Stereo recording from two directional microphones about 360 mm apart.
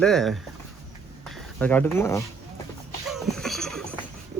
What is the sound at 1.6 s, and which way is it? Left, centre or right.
Speech, centre.